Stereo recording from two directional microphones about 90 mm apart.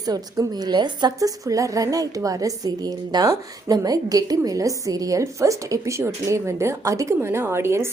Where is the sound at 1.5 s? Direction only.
40° right (ahead or behind).